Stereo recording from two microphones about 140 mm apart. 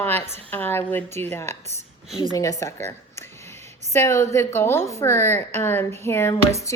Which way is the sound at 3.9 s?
20° left (ahead or behind).